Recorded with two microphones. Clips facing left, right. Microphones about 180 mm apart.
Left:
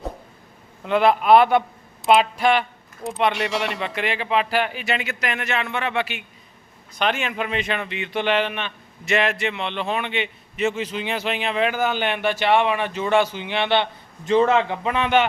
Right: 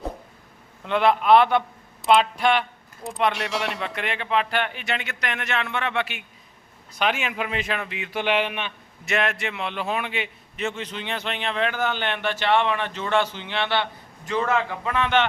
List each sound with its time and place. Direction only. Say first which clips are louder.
0.9 s a man's voice: left 2 dB; 5° left (ahead or behind)